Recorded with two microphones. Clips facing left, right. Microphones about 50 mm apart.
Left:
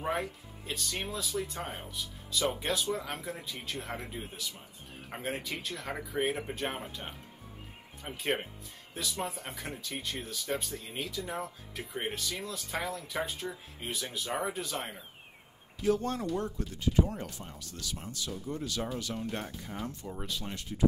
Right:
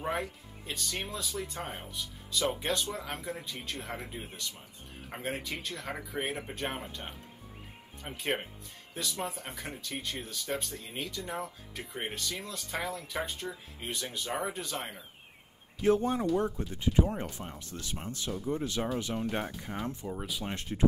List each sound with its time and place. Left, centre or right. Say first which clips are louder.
0.0 s speech: left 1 dB; centre
16.0 s speech: right 4 dB; centre
20.1 s speech: right 2 dB; centre
20.4 s speech: right 3 dB; right